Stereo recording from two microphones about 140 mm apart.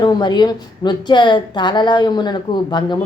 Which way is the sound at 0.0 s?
30° left (ahead or behind).